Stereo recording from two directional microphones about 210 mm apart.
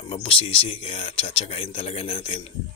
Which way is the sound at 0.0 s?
25° left (ahead or behind).